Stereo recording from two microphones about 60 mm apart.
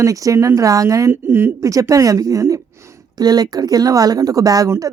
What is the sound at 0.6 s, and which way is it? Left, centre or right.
Speech, right.